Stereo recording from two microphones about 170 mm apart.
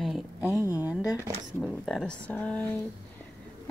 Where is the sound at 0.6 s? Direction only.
20° left (ahead or behind).